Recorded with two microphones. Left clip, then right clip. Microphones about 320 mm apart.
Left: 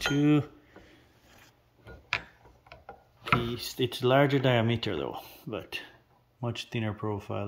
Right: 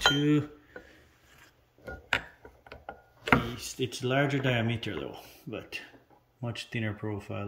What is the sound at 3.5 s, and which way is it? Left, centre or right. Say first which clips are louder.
Speech: left 4 dB; left.